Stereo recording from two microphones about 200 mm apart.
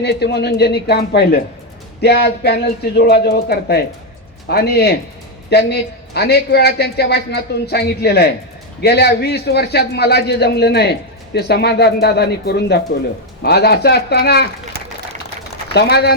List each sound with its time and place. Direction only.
0.0 s a woman's voice: 55° left (ahead or behind)
15.7 s a woman's voice: 55° left (ahead or behind)